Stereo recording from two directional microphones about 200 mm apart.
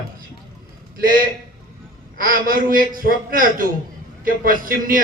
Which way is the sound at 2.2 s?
45° right (ahead or behind).